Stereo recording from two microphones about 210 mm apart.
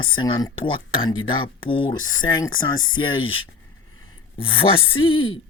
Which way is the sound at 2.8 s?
70° left (ahead or behind).